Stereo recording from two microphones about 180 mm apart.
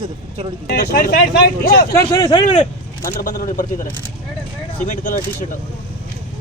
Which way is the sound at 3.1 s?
50° left (ahead or behind).